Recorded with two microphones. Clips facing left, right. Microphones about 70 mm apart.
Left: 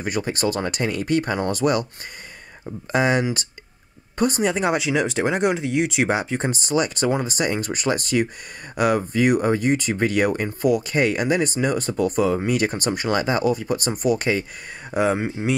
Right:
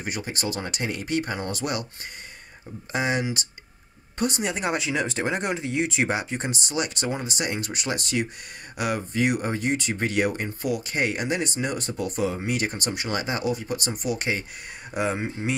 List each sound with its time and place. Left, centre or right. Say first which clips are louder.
0.0 s speech: left 7 dB; left
2.9 s speech: left 6 dB; left
4.6 s speech: left 5 dB; left
15.0 s speech: left 6 dB; left